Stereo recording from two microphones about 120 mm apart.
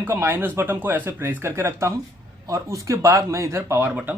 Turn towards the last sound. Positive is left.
turn(degrees=-15)  # may be behind; listen again after turning